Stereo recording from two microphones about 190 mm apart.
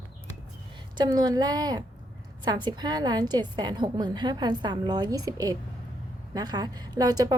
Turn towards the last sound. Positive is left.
turn(degrees=-20)  # may be behind; listen again after turning